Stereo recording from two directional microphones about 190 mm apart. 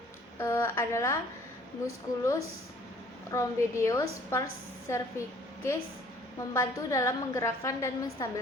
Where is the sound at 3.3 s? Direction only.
15° left (ahead or behind).